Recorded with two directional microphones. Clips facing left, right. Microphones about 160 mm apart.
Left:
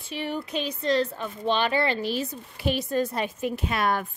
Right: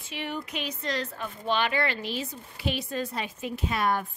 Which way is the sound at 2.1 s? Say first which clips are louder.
Left 5 dB; 45° left (ahead or behind).